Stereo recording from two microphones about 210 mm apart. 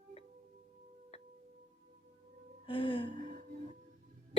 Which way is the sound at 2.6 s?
25° left (ahead or behind).